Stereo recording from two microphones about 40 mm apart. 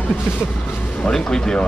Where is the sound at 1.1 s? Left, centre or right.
Centre.